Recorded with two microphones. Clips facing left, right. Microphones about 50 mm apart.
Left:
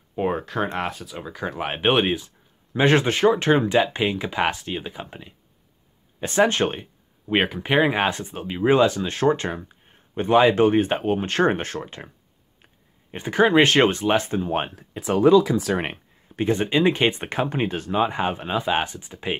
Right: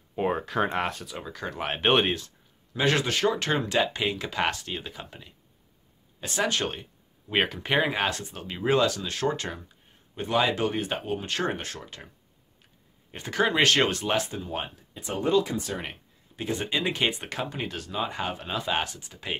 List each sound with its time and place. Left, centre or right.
0.1 s speech: centre
2.7 s speech: left
6.2 s speech: left
7.3 s speech: centre; by 12.1 s left
13.1 s speech: left
15.0 s speech: left
15.8 s a sound: left
16.6 s speech: left